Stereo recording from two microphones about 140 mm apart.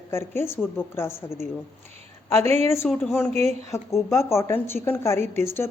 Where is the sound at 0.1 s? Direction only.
15° left (ahead or behind).